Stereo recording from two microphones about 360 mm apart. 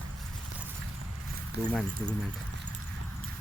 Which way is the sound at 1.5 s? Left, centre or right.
Right.